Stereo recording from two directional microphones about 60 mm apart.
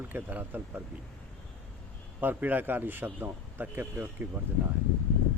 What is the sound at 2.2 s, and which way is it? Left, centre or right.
A man's voice, right.